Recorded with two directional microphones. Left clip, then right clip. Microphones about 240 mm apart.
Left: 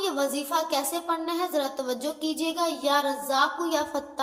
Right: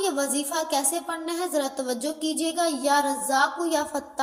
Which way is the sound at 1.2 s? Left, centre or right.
Centre.